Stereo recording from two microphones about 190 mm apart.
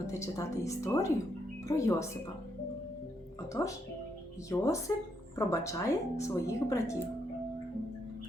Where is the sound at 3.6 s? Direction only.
15° left (ahead or behind).